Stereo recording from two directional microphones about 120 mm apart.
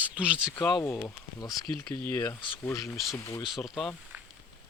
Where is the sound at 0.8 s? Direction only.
20° left (ahead or behind).